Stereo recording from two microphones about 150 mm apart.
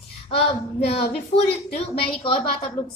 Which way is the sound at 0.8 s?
40° left (ahead or behind).